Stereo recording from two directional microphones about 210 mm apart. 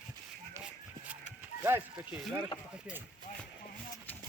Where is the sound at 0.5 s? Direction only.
5° right (ahead or behind).